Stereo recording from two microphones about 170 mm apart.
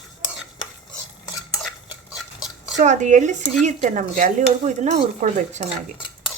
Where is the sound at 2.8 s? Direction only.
45° right (ahead or behind).